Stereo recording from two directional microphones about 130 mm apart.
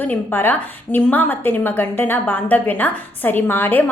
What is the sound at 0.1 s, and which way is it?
A woman's voice, 15° left (ahead or behind).